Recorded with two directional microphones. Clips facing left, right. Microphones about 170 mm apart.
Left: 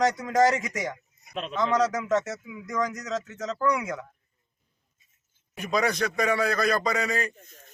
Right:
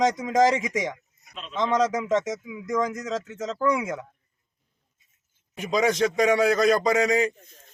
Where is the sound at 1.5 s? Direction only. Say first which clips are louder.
Right 2 dB; 20° right (ahead or behind).